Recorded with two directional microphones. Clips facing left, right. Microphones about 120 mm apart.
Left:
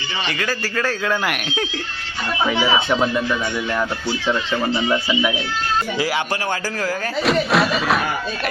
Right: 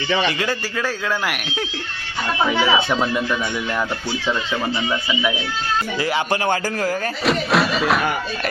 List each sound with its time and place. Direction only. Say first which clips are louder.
0.3 s speech: right 2 dB; 25° right (ahead or behind)
1.0 s speech: left 2 dB; 5° right (ahead or behind)
7.3 s speech: left 1 dB; centre (ahead or behind)